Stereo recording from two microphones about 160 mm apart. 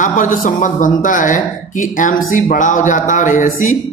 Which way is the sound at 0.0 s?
55° left (ahead or behind).